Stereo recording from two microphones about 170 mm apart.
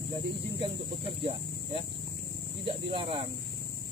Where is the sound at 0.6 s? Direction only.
30° right (ahead or behind).